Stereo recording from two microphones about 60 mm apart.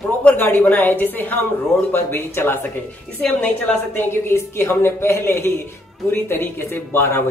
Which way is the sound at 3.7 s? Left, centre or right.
Centre.